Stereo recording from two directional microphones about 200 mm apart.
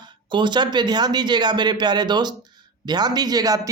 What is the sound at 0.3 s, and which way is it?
A man's voice, 25° right (ahead or behind).